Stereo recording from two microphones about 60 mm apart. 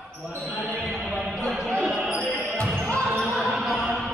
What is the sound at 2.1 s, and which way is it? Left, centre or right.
Basketball bounce, centre.